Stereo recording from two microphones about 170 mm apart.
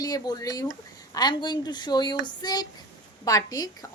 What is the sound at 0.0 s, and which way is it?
A woman's voice, 20° left (ahead or behind).